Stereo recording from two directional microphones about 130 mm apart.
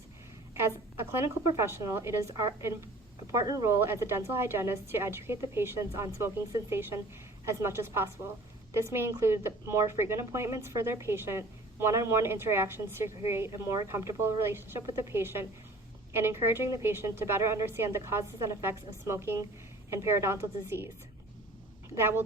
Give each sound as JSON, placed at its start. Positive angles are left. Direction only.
{"t": 0.5, "sound": "a woman's voice", "side_deg": -20}
{"t": 21.9, "sound": "a woman's voice", "side_deg": -20}